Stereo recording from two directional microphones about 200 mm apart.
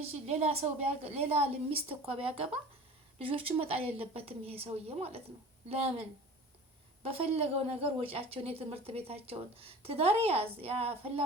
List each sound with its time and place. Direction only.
0.1 s a woman's voice: 30° right (ahead or behind)
7.0 s a woman's voice: 30° right (ahead or behind)